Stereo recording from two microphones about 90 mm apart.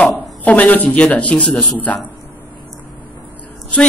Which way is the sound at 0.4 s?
20° left (ahead or behind).